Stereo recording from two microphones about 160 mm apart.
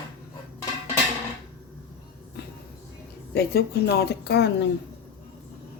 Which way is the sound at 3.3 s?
85° left.